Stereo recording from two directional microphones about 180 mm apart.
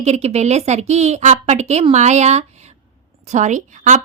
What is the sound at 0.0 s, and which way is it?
A woman's voice, 35° right (ahead or behind).